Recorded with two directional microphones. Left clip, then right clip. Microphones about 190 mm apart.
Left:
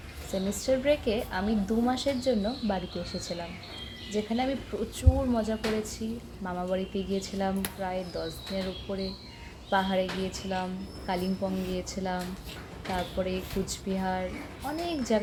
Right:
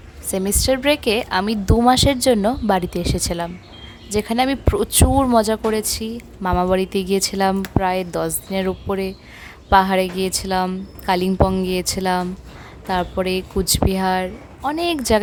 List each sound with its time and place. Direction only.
0.3 s a woman's voice: 60° right (ahead or behind)